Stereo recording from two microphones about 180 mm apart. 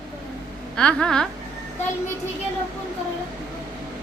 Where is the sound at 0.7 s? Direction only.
5° left (ahead or behind).